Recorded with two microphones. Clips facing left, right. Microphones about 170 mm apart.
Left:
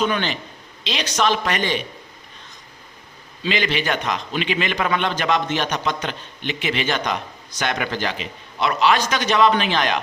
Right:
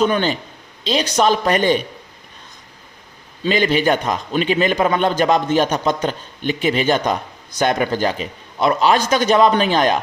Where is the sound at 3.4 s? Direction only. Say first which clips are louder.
Right 6 dB; 45° right (ahead or behind).